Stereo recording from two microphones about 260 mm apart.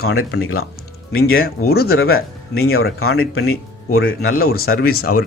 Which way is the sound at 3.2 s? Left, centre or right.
Left.